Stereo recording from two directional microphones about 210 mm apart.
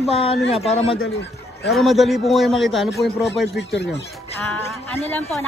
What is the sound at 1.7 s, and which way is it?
A man's voice, centre (ahead or behind).